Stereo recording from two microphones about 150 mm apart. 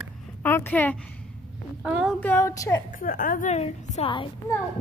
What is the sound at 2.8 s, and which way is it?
A woman's voice, 70° left (ahead or behind).